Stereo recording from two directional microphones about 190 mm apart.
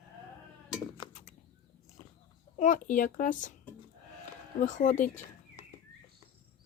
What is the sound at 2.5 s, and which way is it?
Speech, 40° left (ahead or behind).